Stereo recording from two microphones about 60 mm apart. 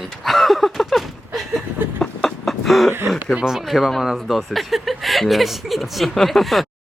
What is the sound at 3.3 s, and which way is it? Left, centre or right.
Speech, centre.